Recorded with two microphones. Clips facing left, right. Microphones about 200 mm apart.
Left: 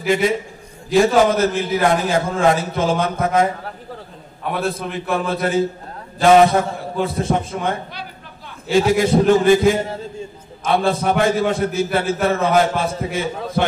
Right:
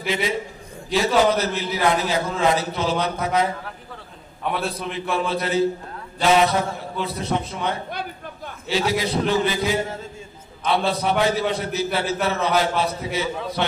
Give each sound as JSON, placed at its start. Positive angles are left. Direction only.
{"t": 0.0, "sound": "a man's voice", "side_deg": 50}
{"t": 4.5, "sound": "a man's voice", "side_deg": 0}
{"t": 5.3, "sound": "a man's voice", "side_deg": 50}